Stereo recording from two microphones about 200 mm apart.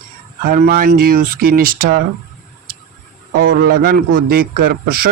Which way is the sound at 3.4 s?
75° right (ahead or behind).